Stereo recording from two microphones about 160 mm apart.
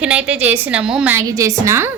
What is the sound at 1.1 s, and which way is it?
Speech, 20° right (ahead or behind).